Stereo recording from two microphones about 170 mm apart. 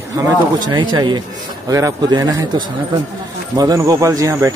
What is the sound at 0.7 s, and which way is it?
Speech, 25° right (ahead or behind).